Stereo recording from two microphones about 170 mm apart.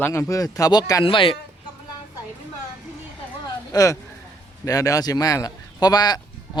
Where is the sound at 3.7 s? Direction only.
20° left (ahead or behind).